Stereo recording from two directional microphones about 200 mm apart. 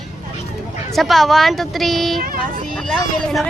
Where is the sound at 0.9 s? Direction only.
Centre (ahead or behind).